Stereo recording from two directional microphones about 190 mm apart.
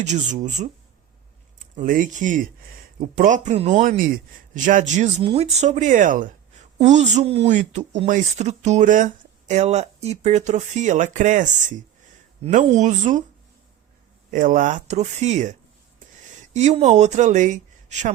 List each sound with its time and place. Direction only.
0.0 s speech: 40° right (ahead or behind)
1.7 s speech: 45° right (ahead or behind)
14.3 s speech: 45° right (ahead or behind)
16.6 s speech: 35° right (ahead or behind)